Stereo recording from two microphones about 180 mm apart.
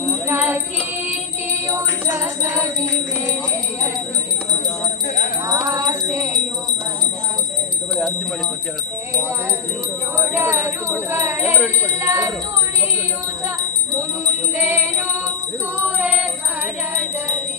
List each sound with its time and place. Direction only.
0.3 s music: 10° right (ahead or behind)
5.5 s music: 15° right (ahead or behind)
10.2 s speech: 15° right (ahead or behind)
13.6 s music: 15° right (ahead or behind)